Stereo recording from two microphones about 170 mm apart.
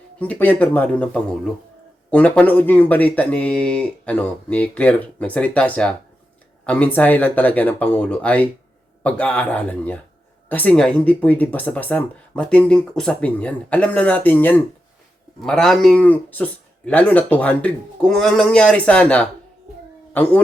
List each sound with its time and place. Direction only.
0.2 s speech: 10° left (ahead or behind)